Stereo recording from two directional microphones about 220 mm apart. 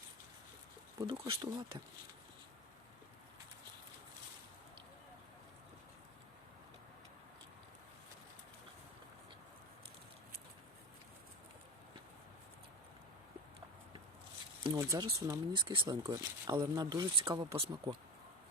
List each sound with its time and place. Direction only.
0.9 s speech: 20° right (ahead or behind)
14.6 s speech: 15° right (ahead or behind)